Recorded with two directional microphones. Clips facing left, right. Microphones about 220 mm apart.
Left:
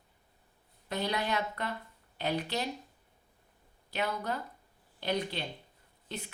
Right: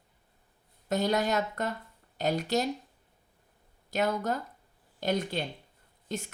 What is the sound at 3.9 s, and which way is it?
Speech, 45° right (ahead or behind).